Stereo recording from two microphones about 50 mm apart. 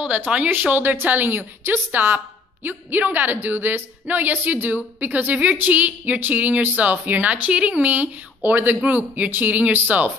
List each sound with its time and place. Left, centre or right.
0.0 s a woman's voice: right